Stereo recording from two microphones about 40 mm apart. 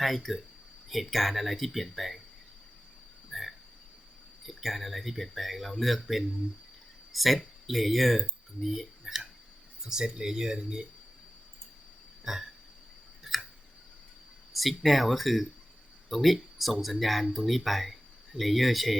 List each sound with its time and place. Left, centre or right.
0.0 s speech: centre
3.3 s a sound: centre
4.4 s speech: centre
7.1 s speech: centre
9.8 s speech: centre
12.2 s burping: centre
14.5 s speech: centre